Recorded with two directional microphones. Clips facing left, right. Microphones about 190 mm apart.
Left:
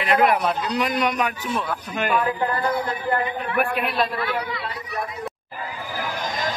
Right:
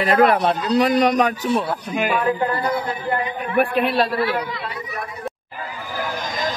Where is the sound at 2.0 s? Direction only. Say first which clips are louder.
Right 1 dB; 5° right (ahead or behind).